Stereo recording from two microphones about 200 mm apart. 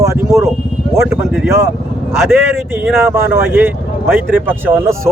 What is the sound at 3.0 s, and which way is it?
Speech, 10° right (ahead or behind).